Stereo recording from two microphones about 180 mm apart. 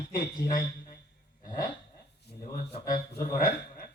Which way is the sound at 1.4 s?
50° left (ahead or behind).